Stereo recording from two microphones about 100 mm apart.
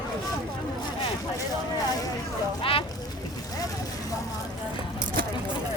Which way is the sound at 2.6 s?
65° left (ahead or behind).